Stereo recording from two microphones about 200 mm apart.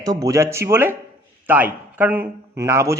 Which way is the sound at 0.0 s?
20° right (ahead or behind).